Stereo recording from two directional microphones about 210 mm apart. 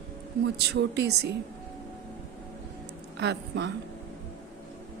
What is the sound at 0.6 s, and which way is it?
Speech, 50° right (ahead or behind).